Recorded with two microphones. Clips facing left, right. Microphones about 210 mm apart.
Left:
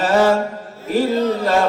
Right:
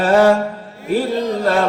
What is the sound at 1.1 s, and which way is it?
Speech, 15° right (ahead or behind).